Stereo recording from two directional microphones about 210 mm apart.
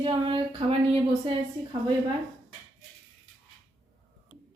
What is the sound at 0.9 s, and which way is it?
Speech, 25° right (ahead or behind).